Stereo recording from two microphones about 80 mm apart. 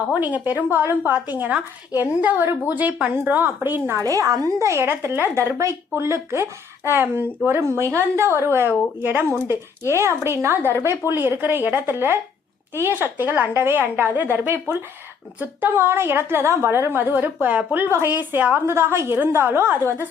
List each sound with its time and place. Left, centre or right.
0.1 s a woman's voice: right
4.0 s speech: right
4.6 s a woman's voice: right
18.6 s speech: right